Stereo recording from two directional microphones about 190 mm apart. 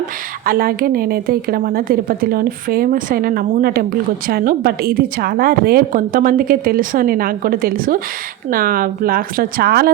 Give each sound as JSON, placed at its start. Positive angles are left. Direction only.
{"t": 0.4, "sound": "a woman's voice", "side_deg": -50}